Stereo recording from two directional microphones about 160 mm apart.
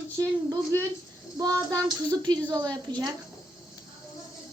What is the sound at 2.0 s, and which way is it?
A woman's voice, 25° right (ahead or behind).